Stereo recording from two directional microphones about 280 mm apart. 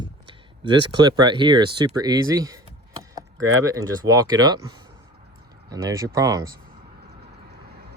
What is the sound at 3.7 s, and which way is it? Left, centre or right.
Speech, centre.